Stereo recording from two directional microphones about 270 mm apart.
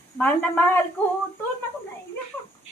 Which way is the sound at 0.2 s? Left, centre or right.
Centre.